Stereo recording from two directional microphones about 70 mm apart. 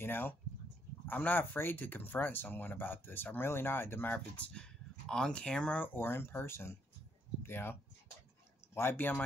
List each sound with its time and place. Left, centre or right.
0.0 s speech: left
4.4 s speech: centre
5.9 s speech: left
8.7 s speech: left